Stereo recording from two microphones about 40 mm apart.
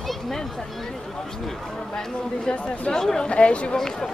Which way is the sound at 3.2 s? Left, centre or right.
Left.